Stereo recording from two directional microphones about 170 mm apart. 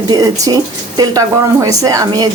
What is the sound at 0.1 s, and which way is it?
Speech, 20° right (ahead or behind).